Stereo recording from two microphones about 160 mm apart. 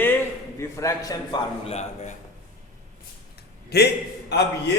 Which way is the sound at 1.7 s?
45° left (ahead or behind).